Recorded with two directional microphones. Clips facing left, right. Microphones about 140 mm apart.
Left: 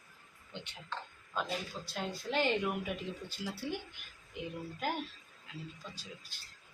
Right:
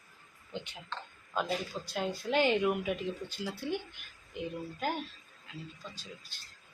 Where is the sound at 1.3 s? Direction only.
5° right (ahead or behind).